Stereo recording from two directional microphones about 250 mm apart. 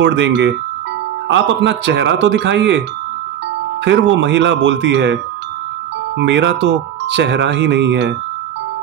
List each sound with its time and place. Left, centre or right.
0.0 s speech: right
3.8 s speech: right